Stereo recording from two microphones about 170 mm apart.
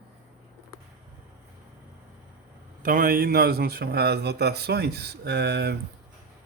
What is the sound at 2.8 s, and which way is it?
A man's voice, 55° right (ahead or behind).